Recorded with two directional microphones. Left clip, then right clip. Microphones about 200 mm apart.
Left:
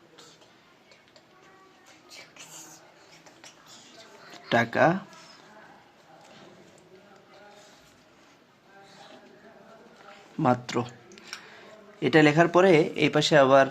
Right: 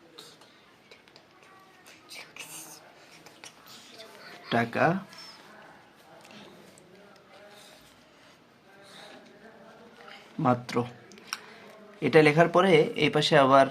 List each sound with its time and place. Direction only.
4.4 s speech: 25° left (ahead or behind)
10.4 s speech: 20° left (ahead or behind)